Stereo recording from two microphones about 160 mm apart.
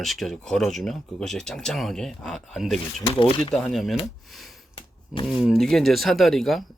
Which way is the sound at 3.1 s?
40° left (ahead or behind).